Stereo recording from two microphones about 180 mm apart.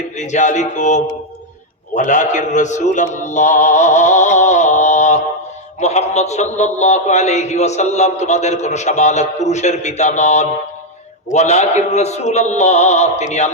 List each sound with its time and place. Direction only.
0.2 s mantra: 40° left (ahead or behind)
5.8 s a man's voice: 40° left (ahead or behind)